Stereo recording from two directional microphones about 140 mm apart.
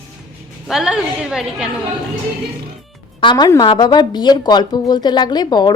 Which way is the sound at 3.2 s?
35° left (ahead or behind).